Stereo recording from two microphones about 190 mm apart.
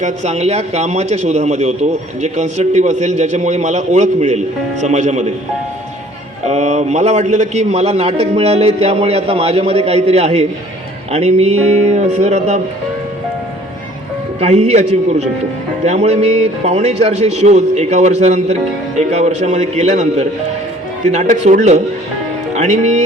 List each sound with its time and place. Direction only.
0.0 s a man's voice: 35° right (ahead or behind)
6.5 s a man's voice: 35° right (ahead or behind)
14.3 s a man's voice: 35° right (ahead or behind)